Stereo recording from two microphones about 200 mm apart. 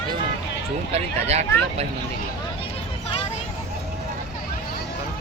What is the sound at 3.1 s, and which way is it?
Vehicle, 30° left (ahead or behind).